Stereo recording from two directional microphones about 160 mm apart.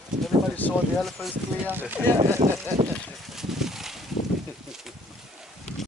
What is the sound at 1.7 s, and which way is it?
Speech, 10° right (ahead or behind).